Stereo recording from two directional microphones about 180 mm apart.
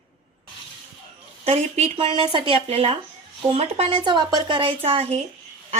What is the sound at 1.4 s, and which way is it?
Speech, 35° right (ahead or behind).